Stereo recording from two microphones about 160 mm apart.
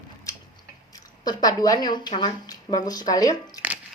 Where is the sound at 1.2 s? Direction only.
25° left (ahead or behind).